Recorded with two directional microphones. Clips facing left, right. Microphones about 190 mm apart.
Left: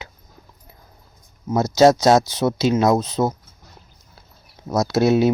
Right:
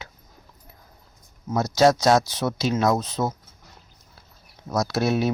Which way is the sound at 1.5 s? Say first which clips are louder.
Left 4 dB; 25° left (ahead or behind).